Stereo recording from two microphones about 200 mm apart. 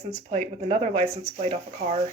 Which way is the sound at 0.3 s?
35° right (ahead or behind).